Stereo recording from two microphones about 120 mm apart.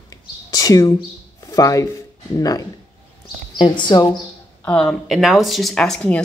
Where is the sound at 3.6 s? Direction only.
40° left (ahead or behind).